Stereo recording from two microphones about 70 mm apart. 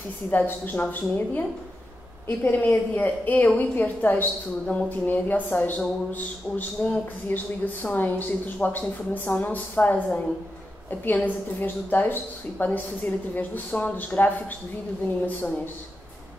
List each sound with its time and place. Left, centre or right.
0.3 s speech: left
6.8 s speech: left
15.2 s speech: left